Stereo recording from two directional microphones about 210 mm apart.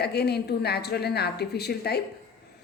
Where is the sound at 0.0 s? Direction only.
50° left (ahead or behind).